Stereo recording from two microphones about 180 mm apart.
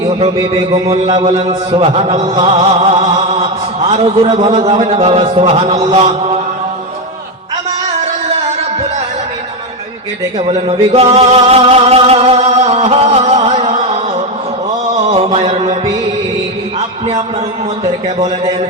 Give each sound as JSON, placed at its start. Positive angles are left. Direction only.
{"t": 0.3, "sound": "a sound", "side_deg": -20}
{"t": 1.1, "sound": "chant", "side_deg": -40}
{"t": 10.3, "sound": "music", "side_deg": -35}
{"t": 15.1, "sound": "mantra", "side_deg": -30}